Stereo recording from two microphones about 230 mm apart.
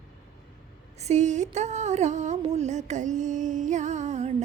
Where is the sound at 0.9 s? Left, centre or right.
Right.